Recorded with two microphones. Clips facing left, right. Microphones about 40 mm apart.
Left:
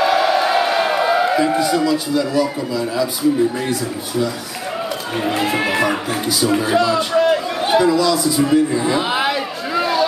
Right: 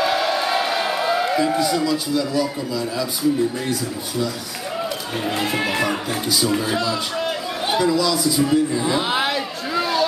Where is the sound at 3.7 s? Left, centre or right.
Centre.